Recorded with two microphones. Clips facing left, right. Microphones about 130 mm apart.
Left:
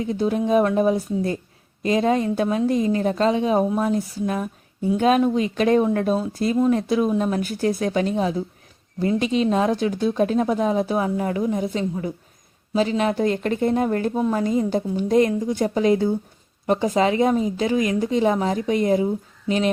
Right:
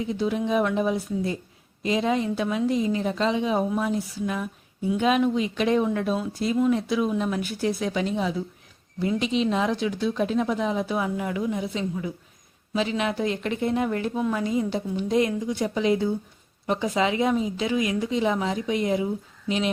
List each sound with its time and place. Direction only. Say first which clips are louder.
0.1 s speech: left 6 dB; 45° left (ahead or behind)